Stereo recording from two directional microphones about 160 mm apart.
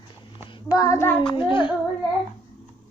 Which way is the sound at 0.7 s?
20° left (ahead or behind).